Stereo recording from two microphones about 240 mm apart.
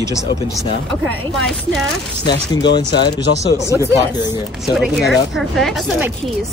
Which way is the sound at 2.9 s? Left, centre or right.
Left.